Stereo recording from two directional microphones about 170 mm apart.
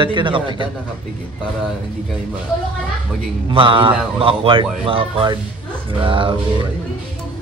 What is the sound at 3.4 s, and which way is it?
Speech, 30° right (ahead or behind).